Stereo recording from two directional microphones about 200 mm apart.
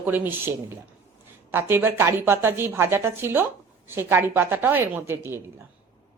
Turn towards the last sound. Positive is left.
turn(degrees=-10)  # may be behind; listen again after turning